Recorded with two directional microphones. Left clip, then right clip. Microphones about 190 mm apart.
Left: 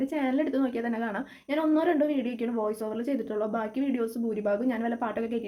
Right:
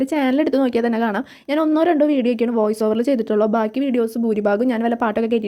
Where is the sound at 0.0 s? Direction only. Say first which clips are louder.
Right 10 dB; 50° right (ahead or behind).